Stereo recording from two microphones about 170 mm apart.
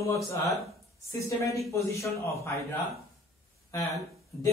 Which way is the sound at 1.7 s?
20° left (ahead or behind).